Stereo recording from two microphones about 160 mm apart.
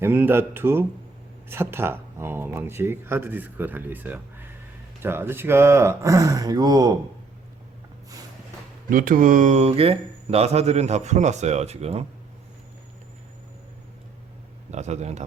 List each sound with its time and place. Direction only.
0.0 s speech: 15° right (ahead or behind)
8.9 s speech: 60° right (ahead or behind); by 12.0 s 40° right (ahead or behind)
14.7 s speech: 45° right (ahead or behind)